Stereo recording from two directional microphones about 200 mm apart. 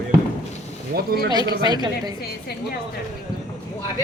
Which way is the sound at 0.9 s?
50° right (ahead or behind).